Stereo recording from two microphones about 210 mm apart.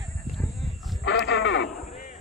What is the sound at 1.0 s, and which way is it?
Sheep, 60° left (ahead or behind).